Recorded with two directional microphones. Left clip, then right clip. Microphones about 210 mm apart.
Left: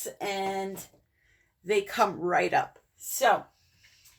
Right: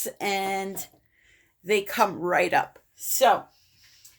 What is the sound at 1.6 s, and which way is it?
Speech, 30° right (ahead or behind).